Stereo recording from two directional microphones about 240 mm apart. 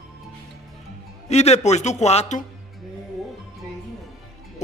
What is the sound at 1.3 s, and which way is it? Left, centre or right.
Speech, left.